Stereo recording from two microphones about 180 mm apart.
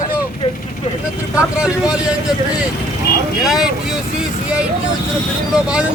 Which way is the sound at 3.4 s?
Centre (ahead or behind).